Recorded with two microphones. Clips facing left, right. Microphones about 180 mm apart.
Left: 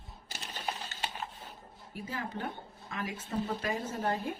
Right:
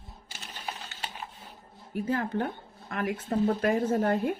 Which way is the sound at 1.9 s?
55° right (ahead or behind).